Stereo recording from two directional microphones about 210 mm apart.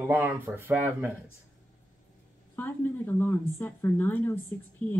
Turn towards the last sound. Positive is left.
turn(degrees=10)  # may be behind; listen again after turning